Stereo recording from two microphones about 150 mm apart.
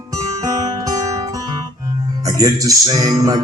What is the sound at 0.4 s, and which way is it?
Music, 20° right (ahead or behind).